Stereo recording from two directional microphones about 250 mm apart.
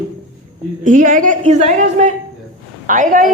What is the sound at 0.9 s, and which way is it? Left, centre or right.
A woman's voice, right.